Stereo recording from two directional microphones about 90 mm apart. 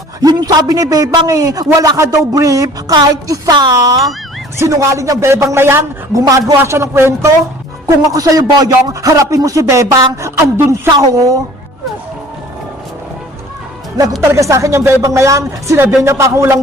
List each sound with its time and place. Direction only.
0.2 s a man's voice: 45° right (ahead or behind); by 5.8 s 25° right (ahead or behind)
6.1 s a man's voice: 40° right (ahead or behind)
7.9 s a man's voice: 40° right (ahead or behind)
10.9 s a man's voice: 40° right (ahead or behind)
14.2 s a man's voice: 35° right (ahead or behind)